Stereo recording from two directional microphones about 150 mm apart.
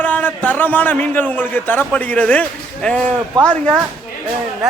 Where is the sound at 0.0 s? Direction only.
10° left (ahead or behind).